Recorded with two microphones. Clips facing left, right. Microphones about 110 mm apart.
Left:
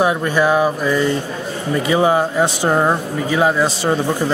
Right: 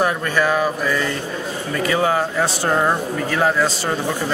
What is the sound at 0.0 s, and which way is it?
Speech, 15° left (ahead or behind).